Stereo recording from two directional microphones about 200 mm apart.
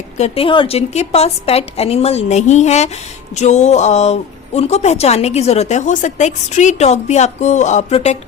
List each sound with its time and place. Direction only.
0.2 s a woman's voice: 25° left (ahead or behind)